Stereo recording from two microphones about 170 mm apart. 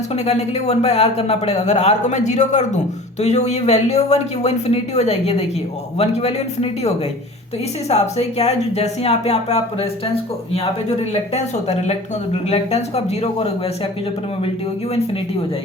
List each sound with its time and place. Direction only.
0.1 s speech: 40° left (ahead or behind)